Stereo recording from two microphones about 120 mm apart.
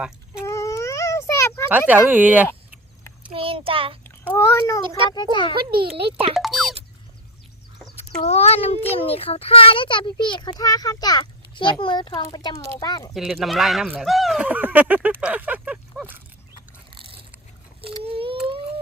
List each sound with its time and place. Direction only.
0.4 s baby cry: 25° left (ahead or behind)
1.9 s speech: 15° right (ahead or behind)
3.3 s child singing: 50° right (ahead or behind)
4.0 s a child's voice: 15° left (ahead or behind)
5.1 s a child's voice: 40° left (ahead or behind)
5.5 s a child's voice: 45° right (ahead or behind)
6.3 s music: centre (ahead or behind)
8.2 s a child's voice: 60° left (ahead or behind); by 13.1 s 35° left (ahead or behind)
13.1 s speech: centre (ahead or behind)
16.9 s a sound: 45° right (ahead or behind)